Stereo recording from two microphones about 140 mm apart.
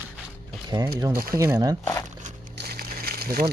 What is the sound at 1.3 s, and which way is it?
Speech, 25° right (ahead or behind).